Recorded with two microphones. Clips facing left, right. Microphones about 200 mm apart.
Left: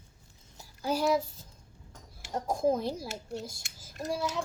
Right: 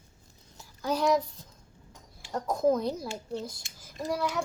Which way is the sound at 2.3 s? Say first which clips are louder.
Right 2 dB; 25° left (ahead or behind).